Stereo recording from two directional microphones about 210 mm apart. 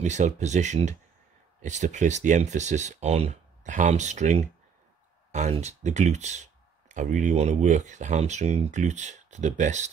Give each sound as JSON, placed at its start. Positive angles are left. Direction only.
{"t": 0.0, "sound": "speech", "side_deg": -35}